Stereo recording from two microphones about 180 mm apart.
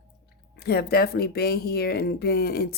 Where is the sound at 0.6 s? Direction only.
60° left (ahead or behind).